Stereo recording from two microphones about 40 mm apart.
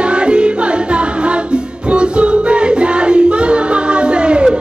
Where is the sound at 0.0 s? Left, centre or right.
Right.